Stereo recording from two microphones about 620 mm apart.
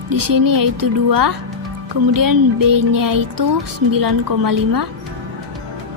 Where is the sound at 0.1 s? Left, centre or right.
Right.